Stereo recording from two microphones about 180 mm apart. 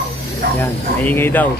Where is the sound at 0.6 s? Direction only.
10° left (ahead or behind).